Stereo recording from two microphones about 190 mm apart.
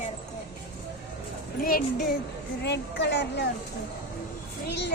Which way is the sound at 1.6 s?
50° left (ahead or behind).